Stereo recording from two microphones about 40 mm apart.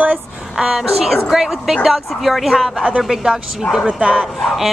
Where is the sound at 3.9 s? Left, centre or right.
Right.